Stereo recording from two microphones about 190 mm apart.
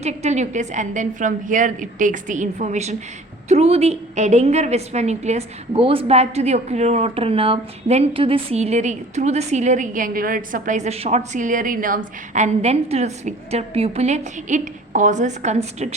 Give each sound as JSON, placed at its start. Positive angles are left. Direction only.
{"t": 0.0, "sound": "a woman's voice", "side_deg": -35}